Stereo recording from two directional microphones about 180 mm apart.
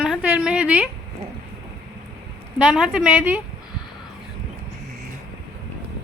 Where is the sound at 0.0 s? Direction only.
5° right (ahead or behind).